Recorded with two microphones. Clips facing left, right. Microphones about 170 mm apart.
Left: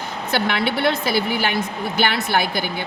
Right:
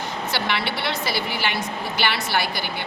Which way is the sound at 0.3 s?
50° left (ahead or behind).